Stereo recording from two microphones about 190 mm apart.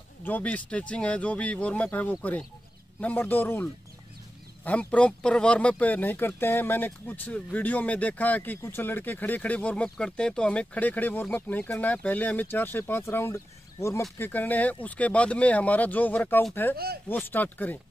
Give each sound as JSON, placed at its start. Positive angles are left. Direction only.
{"t": 0.2, "sound": "speech", "side_deg": 10}
{"t": 4.6, "sound": "speech", "side_deg": 5}
{"t": 16.7, "sound": "speech", "side_deg": -55}
{"t": 17.1, "sound": "speech", "side_deg": 10}